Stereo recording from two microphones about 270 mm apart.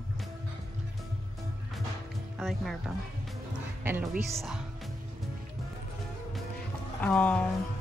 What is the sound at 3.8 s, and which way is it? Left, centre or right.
Speech, centre.